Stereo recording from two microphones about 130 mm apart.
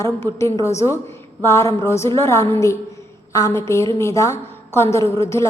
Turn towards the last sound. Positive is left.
turn(degrees=25)  # may be behind; listen again after turning